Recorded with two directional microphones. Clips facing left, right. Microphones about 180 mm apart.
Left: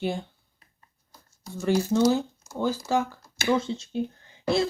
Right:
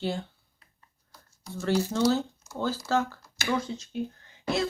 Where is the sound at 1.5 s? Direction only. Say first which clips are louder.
Left 4 dB; 15° left (ahead or behind).